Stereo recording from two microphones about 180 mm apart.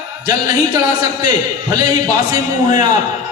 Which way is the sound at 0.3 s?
20° right (ahead or behind).